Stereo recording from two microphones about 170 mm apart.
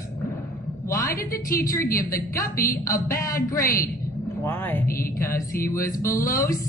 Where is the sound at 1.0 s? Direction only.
60° left (ahead or behind).